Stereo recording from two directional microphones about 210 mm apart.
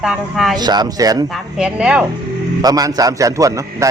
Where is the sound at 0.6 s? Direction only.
20° right (ahead or behind).